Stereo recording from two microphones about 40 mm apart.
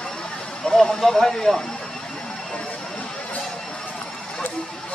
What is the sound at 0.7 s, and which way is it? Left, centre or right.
Speech, centre.